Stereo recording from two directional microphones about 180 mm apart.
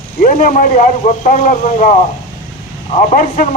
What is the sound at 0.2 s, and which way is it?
A man's voice, 45° left (ahead or behind).